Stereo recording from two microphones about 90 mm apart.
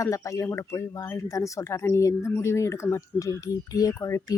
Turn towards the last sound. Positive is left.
turn(degrees=35)  # may be behind; listen again after turning